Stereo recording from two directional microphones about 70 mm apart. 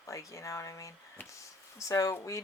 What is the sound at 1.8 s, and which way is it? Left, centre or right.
Speech, left.